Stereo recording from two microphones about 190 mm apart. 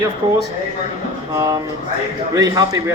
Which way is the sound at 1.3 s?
15° right (ahead or behind).